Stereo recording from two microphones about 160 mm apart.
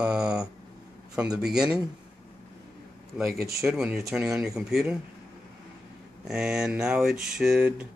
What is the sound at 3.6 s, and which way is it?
Speech, 5° right (ahead or behind).